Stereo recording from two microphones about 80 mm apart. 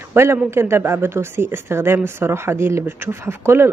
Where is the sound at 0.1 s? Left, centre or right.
Right.